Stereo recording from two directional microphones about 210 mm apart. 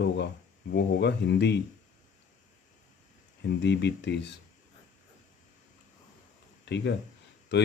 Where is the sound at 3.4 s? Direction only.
55° left (ahead or behind).